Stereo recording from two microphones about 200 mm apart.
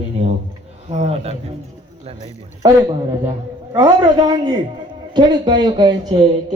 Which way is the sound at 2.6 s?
20° right (ahead or behind).